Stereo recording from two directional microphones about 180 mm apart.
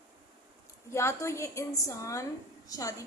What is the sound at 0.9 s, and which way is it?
A woman's voice, 15° left (ahead or behind).